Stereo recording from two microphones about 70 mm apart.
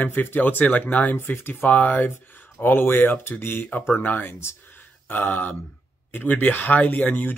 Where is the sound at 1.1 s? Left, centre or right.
Left.